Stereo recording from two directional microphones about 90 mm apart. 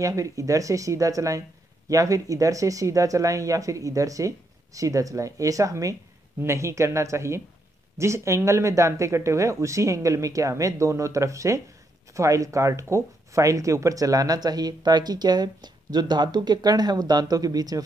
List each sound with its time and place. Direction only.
0.0 s speech: 35° right (ahead or behind)